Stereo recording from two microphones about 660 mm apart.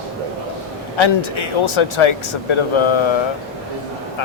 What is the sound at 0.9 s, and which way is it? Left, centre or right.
Speech, left.